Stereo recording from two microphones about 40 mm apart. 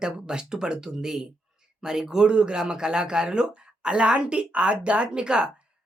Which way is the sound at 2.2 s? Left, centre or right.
Right.